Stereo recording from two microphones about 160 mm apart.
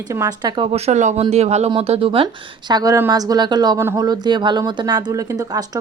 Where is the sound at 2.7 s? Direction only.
25° right (ahead or behind).